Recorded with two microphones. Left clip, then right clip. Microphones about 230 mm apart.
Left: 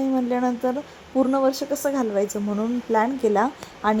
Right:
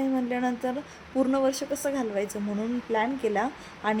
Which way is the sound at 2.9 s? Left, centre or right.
Centre.